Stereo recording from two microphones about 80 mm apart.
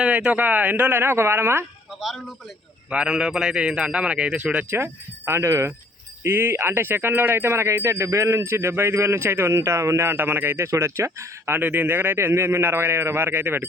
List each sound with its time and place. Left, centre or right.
0.0 s speech: centre
2.0 s a man's voice: centre
4.8 s speech: right